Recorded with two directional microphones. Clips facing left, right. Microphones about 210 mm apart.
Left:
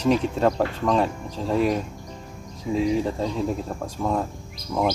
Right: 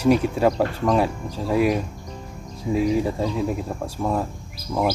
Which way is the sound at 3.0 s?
10° right (ahead or behind).